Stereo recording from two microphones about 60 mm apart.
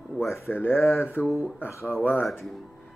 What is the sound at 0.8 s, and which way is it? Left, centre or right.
Mantra, left.